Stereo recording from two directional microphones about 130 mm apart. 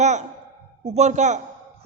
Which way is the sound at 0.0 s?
60° right (ahead or behind).